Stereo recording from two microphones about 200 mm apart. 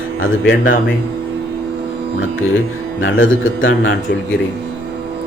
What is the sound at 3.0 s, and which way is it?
Speech, 75° left (ahead or behind).